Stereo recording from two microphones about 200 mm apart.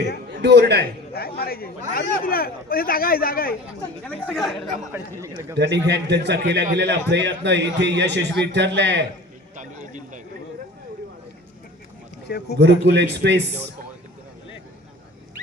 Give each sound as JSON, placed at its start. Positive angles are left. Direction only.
{"t": 0.3, "sound": "a man's voice", "side_deg": -55}
{"t": 1.4, "sound": "speech", "side_deg": 50}
{"t": 4.0, "sound": "speech", "side_deg": 5}
{"t": 4.9, "sound": "speech", "side_deg": -15}
{"t": 5.5, "sound": "a man's voice", "side_deg": -60}
{"t": 9.6, "sound": "a sound", "side_deg": -40}
{"t": 12.5, "sound": "a man's voice", "side_deg": -60}